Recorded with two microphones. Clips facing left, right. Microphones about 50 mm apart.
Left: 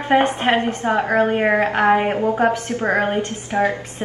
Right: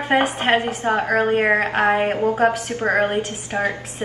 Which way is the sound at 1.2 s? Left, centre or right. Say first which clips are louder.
Left 1 dB; centre.